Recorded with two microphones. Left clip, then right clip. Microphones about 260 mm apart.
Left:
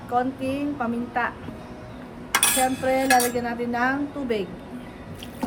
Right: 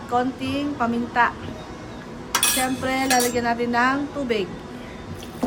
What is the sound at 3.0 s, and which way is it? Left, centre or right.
Speech, left.